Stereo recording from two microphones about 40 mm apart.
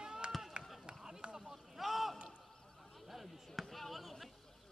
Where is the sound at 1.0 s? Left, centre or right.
Centre.